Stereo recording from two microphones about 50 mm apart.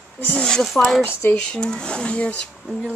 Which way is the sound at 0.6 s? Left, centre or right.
Centre.